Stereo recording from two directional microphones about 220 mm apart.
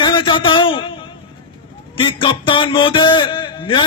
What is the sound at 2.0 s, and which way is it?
A man's voice, 20° left (ahead or behind).